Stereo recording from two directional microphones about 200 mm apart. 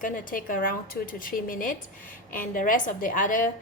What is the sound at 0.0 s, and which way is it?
A woman's voice, 40° left (ahead or behind).